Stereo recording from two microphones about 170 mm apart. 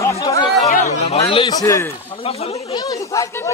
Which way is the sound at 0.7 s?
40° left (ahead or behind).